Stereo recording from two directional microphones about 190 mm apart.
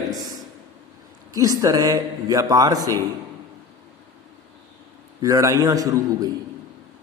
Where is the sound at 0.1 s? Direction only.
20° right (ahead or behind).